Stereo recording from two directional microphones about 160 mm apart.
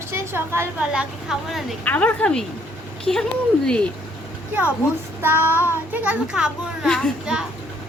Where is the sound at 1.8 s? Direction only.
10° left (ahead or behind).